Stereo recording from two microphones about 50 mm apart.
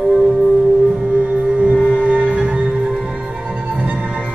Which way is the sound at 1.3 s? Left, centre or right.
Right.